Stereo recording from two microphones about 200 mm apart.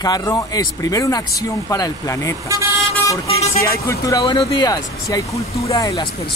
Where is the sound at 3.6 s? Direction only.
15° left (ahead or behind).